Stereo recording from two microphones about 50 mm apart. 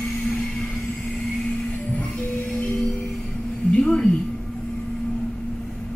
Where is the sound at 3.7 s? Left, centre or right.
Centre.